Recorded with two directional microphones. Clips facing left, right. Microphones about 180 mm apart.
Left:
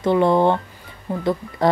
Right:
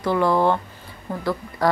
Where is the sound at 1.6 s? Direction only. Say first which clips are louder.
Left 3 dB; 25° left (ahead or behind).